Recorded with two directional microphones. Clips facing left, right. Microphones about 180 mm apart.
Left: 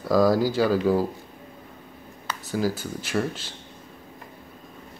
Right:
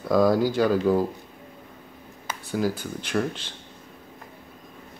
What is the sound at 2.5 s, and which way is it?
Speech, 5° left (ahead or behind).